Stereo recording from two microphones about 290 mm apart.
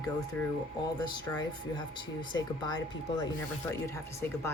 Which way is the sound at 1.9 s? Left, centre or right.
Right.